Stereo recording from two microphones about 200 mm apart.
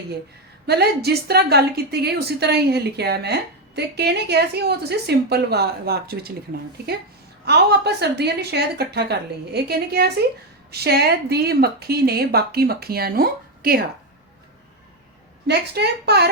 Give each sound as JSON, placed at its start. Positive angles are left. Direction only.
{"t": 0.7, "sound": "a woman's voice", "side_deg": -55}
{"t": 7.4, "sound": "a woman's voice", "side_deg": -55}
{"t": 15.4, "sound": "a woman's voice", "side_deg": -55}